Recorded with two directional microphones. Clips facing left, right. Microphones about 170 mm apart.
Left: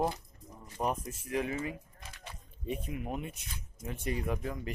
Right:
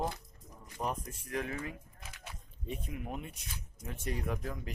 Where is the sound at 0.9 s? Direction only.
5° left (ahead or behind).